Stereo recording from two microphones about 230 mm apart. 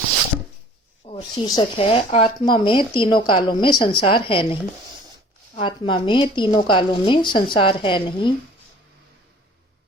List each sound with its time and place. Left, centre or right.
1.0 s speech: centre
5.5 s speech: left